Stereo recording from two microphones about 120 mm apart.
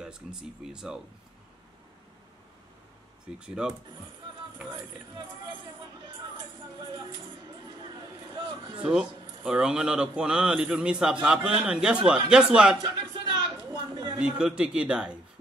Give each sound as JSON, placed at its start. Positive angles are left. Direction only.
{"t": 0.0, "sound": "speech", "side_deg": -5}
{"t": 3.3, "sound": "a man's voice", "side_deg": -5}
{"t": 4.6, "sound": "speech", "side_deg": -40}
{"t": 7.8, "sound": "a sound", "side_deg": -35}
{"t": 9.4, "sound": "a man's voice", "side_deg": -5}
{"t": 12.8, "sound": "a sound", "side_deg": -35}
{"t": 14.4, "sound": "a man's voice", "side_deg": -10}